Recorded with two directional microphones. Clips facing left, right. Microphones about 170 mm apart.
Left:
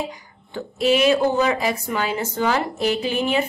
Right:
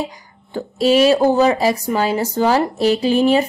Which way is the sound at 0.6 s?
35° right (ahead or behind).